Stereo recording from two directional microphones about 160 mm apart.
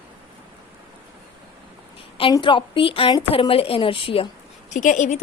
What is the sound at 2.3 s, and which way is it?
A woman's voice, 30° left (ahead or behind).